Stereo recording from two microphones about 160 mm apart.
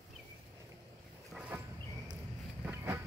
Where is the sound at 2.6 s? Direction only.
15° right (ahead or behind).